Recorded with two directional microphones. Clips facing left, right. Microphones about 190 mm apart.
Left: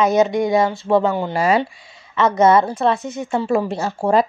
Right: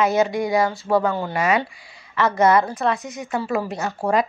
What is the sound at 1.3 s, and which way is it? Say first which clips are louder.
Speech: left 3 dB; 30° left (ahead or behind).